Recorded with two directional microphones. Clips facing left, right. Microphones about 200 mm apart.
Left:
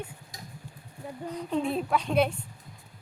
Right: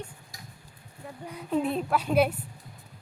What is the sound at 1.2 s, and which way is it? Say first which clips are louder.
A woman's voice: right 1 dB; 5° right (ahead or behind).